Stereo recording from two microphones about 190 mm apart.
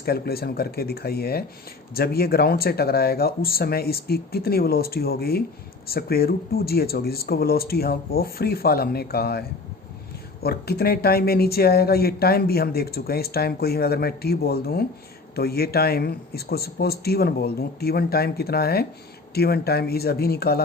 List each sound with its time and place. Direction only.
0.0 s speech: 55° left (ahead or behind)
10.4 s speech: 55° left (ahead or behind)